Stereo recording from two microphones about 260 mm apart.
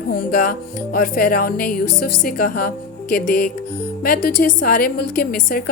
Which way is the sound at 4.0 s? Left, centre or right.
Left.